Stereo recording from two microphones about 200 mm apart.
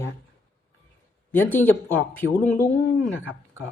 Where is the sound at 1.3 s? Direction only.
10° left (ahead or behind).